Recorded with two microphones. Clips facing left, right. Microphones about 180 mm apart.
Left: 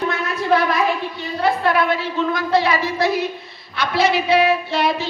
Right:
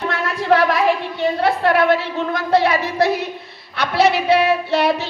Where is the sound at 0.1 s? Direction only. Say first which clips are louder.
Right 5 dB; 80° right.